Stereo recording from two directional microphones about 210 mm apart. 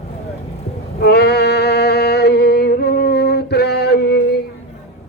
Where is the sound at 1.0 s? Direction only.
50° left (ahead or behind).